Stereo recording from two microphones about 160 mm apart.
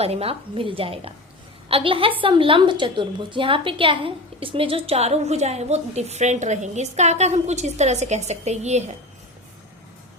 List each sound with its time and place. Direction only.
0.0 s a woman's voice: 40° right (ahead or behind)